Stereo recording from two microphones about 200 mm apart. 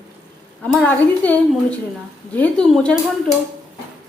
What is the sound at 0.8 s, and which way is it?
A woman's voice, 10° left (ahead or behind).